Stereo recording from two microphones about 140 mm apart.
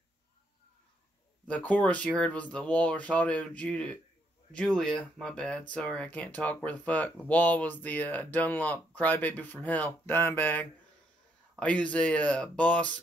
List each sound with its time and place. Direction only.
1.5 s speech: 10° left (ahead or behind)